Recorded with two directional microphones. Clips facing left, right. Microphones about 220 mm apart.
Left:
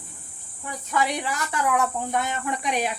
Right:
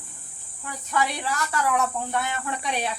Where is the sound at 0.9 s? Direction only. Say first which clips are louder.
Left 1 dB; 15° left (ahead or behind).